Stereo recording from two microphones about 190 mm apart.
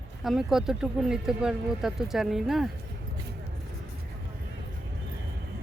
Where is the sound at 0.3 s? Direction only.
Centre (ahead or behind).